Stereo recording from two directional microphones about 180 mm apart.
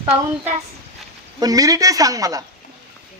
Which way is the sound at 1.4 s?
20° right (ahead or behind).